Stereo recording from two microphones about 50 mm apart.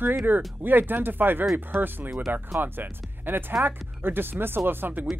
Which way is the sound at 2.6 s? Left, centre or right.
Right.